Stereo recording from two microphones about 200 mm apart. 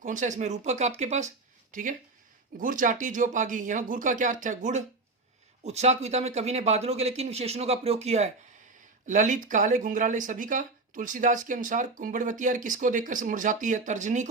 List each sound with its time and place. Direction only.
0.0 s speech: 40° right (ahead or behind)